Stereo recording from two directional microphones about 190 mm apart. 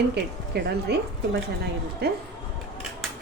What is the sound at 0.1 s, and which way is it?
Speech, 60° right (ahead or behind).